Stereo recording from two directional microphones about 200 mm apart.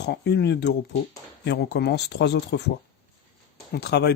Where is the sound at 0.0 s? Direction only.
55° left (ahead or behind).